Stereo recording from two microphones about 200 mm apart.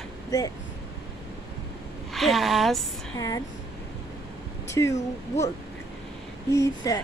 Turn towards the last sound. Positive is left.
turn(degrees=15)  # may be behind; listen again after turning